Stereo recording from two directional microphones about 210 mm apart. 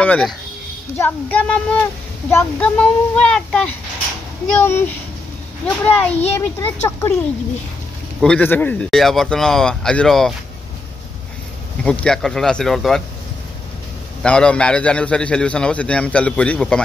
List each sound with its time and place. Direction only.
0.0 s a man's voice: 5° left (ahead or behind)
8.2 s a man's voice: 5° left (ahead or behind)
11.8 s a man's voice: 5° left (ahead or behind)
14.2 s a man's voice: 5° left (ahead or behind)